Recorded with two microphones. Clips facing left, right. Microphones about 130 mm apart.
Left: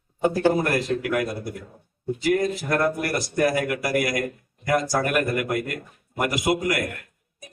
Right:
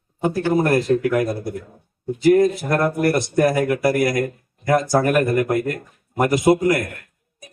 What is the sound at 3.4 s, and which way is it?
A man's voice, 30° right (ahead or behind).